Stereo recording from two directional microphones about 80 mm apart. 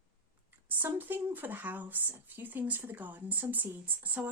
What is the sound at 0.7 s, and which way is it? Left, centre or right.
Speech, right.